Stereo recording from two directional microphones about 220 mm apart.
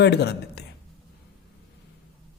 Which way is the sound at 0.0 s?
50° left (ahead or behind).